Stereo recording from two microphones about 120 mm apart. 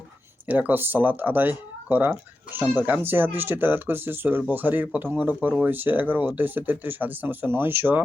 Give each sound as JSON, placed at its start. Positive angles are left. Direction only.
{"t": 0.4, "sound": "speech", "side_deg": -15}